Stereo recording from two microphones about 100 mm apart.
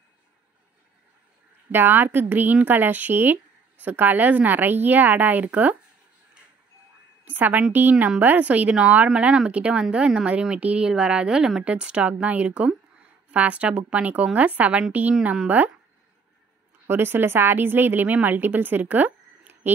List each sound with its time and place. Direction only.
1.7 s a woman's voice: 20° right (ahead or behind)
7.2 s a woman's voice: 15° right (ahead or behind)
16.8 s a woman's voice: 20° right (ahead or behind)